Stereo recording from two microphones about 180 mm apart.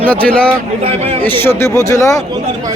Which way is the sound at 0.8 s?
35° right (ahead or behind).